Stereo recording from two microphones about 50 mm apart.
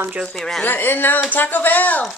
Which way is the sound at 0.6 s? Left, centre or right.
Left.